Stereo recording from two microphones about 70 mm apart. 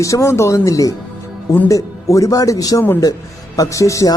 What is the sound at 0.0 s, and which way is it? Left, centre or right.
A man's voice, left.